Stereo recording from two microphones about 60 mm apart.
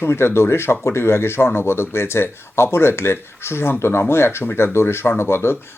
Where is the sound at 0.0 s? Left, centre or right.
Left.